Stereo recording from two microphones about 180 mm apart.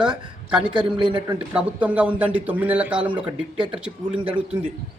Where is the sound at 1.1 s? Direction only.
25° right (ahead or behind).